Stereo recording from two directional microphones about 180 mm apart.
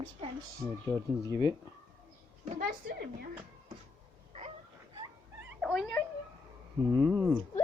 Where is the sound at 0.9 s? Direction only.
10° right (ahead or behind).